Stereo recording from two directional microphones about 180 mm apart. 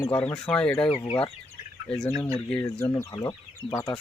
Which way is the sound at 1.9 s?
Centre (ahead or behind).